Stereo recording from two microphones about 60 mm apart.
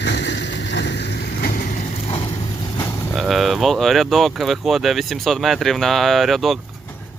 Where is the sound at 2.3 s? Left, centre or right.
Left.